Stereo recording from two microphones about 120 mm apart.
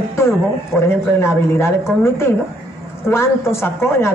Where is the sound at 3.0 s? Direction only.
20° left (ahead or behind).